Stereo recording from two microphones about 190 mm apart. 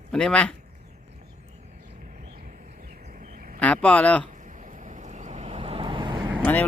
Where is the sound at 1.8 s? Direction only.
40° right (ahead or behind).